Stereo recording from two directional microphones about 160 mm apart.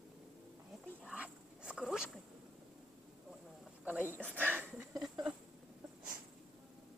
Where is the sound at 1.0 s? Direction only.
5° right (ahead or behind).